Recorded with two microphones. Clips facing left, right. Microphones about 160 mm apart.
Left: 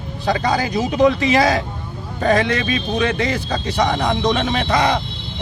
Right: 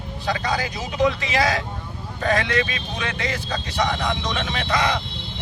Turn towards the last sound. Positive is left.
turn(degrees=35)  # may be behind; listen again after turning